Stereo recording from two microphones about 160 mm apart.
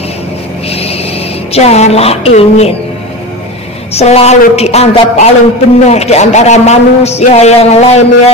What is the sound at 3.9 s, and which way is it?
A man's voice, 40° left (ahead or behind).